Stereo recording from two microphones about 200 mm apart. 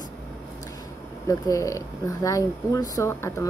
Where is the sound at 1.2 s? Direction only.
15° left (ahead or behind).